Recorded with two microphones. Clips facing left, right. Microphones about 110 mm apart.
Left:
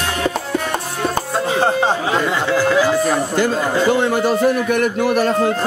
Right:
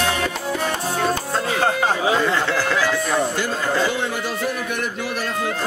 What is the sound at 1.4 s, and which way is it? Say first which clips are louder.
Music: left 4 dB; 25° left (ahead or behind).